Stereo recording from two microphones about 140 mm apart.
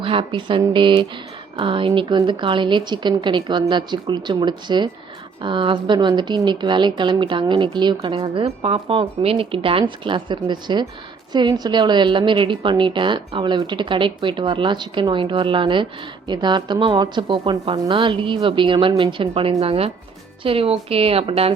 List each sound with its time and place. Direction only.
0.0 s a woman's voice: 40° right (ahead or behind)